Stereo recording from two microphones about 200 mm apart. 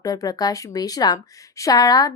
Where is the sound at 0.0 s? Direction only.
20° left (ahead or behind).